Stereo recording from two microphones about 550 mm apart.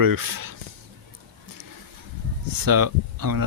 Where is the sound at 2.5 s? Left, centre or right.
Right.